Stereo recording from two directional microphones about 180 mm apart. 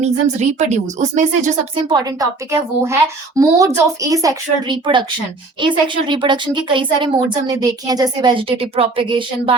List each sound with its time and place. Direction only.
0.0 s speech: 40° right (ahead or behind)
1.7 s a woman's voice: 25° right (ahead or behind)